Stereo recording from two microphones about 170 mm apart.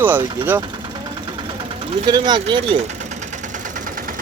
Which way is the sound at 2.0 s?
25° right (ahead or behind).